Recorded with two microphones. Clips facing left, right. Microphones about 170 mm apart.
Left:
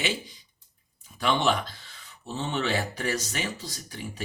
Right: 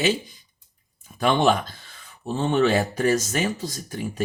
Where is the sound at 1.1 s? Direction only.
50° right (ahead or behind).